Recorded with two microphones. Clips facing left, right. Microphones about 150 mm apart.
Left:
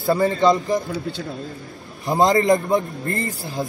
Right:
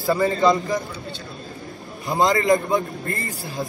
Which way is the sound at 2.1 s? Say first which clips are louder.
Left 2 dB; centre (ahead or behind).